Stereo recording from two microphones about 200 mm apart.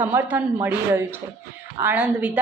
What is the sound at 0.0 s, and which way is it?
A woman's voice, 10° right (ahead or behind).